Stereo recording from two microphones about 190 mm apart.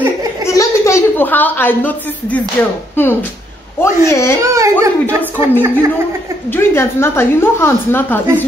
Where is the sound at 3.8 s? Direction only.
15° left (ahead or behind).